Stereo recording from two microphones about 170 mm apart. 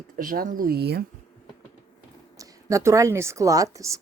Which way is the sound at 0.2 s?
55° right (ahead or behind).